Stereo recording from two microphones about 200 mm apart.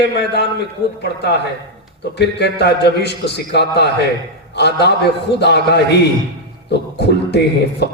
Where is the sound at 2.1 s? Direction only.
55° left (ahead or behind).